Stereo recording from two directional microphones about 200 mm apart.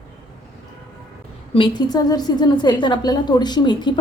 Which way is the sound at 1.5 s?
25° left (ahead or behind).